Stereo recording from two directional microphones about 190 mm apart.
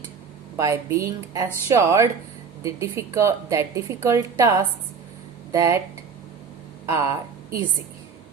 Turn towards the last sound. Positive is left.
turn(degrees=-15)  # may be behind; listen again after turning